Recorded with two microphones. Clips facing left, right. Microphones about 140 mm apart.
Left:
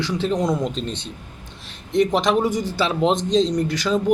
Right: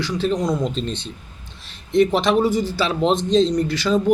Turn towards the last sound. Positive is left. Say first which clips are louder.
# right 2 dB
turn(degrees=15)  # may be behind; listen again after turning